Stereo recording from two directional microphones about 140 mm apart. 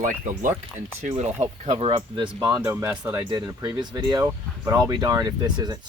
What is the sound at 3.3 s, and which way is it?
Speech, 30° right (ahead or behind).